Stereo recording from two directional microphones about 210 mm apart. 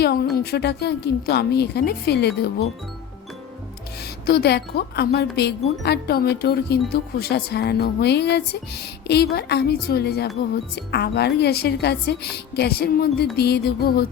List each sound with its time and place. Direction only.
0.0 s speech: 45° left (ahead or behind)
4.3 s speech: 50° left (ahead or behind)